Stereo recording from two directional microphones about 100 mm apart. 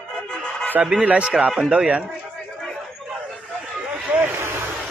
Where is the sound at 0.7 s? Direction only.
10° right (ahead or behind).